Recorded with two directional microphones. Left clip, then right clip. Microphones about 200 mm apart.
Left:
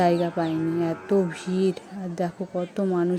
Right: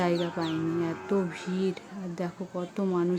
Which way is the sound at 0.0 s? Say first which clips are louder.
Left 6 dB; 15° left (ahead or behind).